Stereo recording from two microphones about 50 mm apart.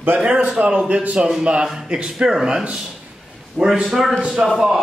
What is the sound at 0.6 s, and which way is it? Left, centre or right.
Speech, right.